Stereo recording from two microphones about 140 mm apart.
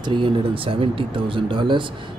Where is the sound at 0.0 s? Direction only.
35° right (ahead or behind).